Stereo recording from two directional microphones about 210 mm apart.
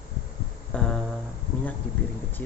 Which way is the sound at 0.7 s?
5° left (ahead or behind).